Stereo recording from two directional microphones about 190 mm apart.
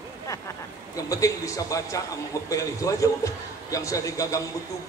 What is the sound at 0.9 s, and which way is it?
Speech, 15° left (ahead or behind).